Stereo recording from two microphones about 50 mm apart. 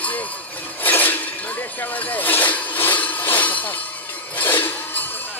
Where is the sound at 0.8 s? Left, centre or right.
Left.